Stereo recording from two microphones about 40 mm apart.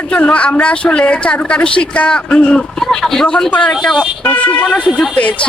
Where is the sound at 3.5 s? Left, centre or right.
Left.